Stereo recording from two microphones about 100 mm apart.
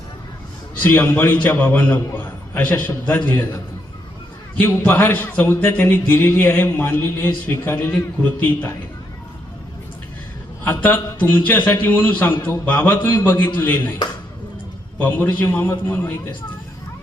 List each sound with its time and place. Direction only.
0.8 s speech: 20° left (ahead or behind)
4.6 s speech: 20° left (ahead or behind)
10.6 s speech: 20° left (ahead or behind)
14.9 s speech: 20° left (ahead or behind)